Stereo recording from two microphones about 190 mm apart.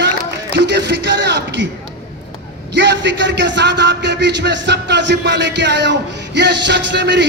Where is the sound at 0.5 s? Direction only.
65° right (ahead or behind).